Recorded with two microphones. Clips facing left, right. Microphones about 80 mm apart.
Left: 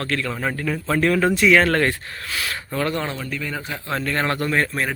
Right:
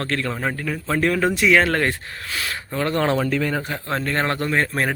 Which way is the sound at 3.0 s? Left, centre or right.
Right.